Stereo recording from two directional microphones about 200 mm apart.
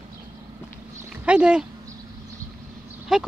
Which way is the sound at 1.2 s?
5° right (ahead or behind).